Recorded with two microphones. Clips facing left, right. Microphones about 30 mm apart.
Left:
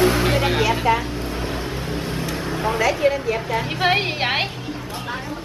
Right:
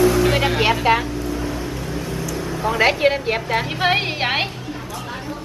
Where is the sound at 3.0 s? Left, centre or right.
Right.